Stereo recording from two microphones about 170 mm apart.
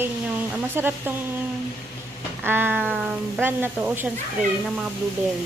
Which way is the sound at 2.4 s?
10° right (ahead or behind).